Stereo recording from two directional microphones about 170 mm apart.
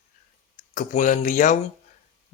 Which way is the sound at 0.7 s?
50° left (ahead or behind).